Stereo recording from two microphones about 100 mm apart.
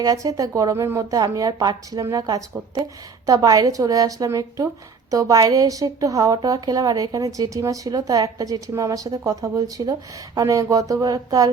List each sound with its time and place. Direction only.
0.0 s a woman's voice: 35° right (ahead or behind)
1.1 s a woman's voice: 40° right (ahead or behind)